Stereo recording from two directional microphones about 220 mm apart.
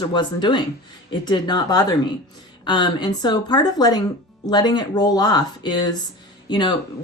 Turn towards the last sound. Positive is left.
turn(degrees=20)  # may be behind; listen again after turning